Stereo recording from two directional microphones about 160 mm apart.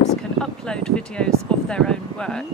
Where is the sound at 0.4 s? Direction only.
5° left (ahead or behind).